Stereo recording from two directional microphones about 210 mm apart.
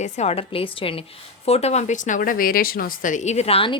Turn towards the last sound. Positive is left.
turn(degrees=25)  # may be behind; listen again after turning